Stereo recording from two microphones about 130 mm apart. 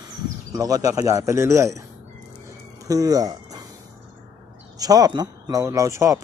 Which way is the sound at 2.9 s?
30° right (ahead or behind).